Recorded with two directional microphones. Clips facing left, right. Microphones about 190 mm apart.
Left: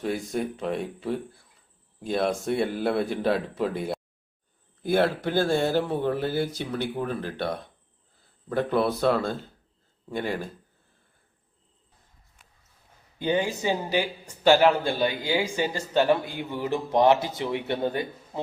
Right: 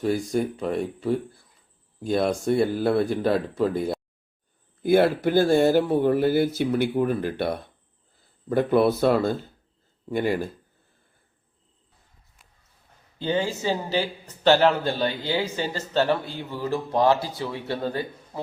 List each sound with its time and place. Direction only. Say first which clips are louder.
0.0 s speech: right 4 dB; centre (ahead or behind)
13.1 s a man's voice: even; 15° left (ahead or behind)